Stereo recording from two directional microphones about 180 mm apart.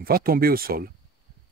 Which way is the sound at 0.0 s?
55° right (ahead or behind).